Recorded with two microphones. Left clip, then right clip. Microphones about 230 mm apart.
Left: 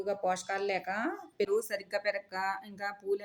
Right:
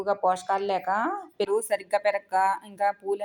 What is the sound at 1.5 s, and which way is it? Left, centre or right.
Speech, centre.